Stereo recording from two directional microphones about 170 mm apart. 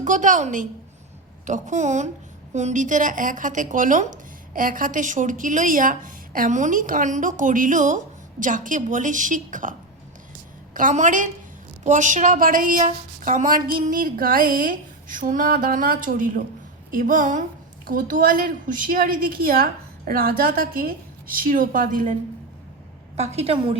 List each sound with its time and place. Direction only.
0.0 s a woman's voice: 45° right (ahead or behind)
10.8 s a woman's voice: 45° right (ahead or behind)
23.1 s a woman's voice: 40° right (ahead or behind)